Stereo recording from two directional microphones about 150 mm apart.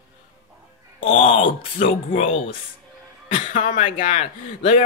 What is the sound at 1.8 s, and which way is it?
Speech, 50° left (ahead or behind).